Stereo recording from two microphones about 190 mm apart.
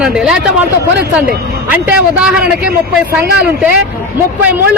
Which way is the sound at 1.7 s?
5° right (ahead or behind).